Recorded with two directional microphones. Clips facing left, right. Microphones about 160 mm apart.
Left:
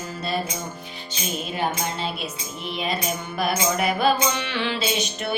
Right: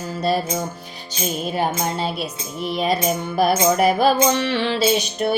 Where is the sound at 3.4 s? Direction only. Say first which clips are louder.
Right 7 dB; 40° right (ahead or behind).